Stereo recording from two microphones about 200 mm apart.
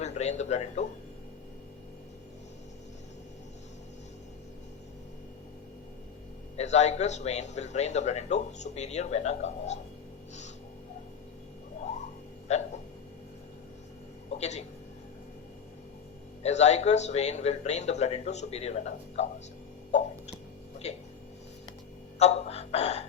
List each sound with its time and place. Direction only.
0.0 s speech: 35° left (ahead or behind)
6.6 s a man's voice: 35° left (ahead or behind)
12.5 s a man's voice: 35° left (ahead or behind)
14.3 s speech: 35° left (ahead or behind)
16.4 s a man's voice: 35° left (ahead or behind)
20.8 s a man's voice: 35° left (ahead or behind)
22.2 s a man's voice: 30° left (ahead or behind)